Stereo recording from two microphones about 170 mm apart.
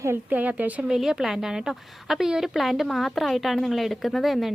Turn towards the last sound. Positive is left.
turn(degrees=0)  # may be behind; listen again after turning